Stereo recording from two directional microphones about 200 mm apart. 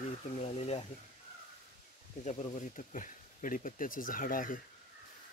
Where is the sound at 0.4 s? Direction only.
30° left (ahead or behind).